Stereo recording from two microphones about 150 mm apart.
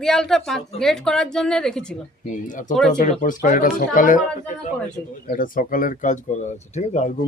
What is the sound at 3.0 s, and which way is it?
Speech, 60° left (ahead or behind).